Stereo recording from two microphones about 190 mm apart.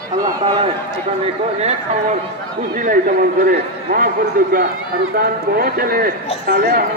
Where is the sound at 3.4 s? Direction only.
50° right (ahead or behind).